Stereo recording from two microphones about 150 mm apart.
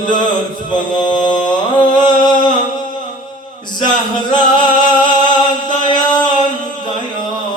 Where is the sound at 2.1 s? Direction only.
30° left (ahead or behind).